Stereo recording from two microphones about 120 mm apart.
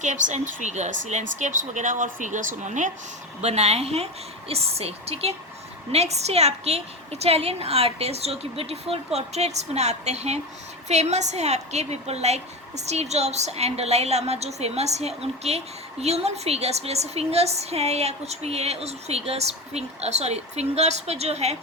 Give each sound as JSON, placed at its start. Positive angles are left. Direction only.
{"t": 0.0, "sound": "speech", "side_deg": -90}
{"t": 3.4, "sound": "a woman's voice", "side_deg": -65}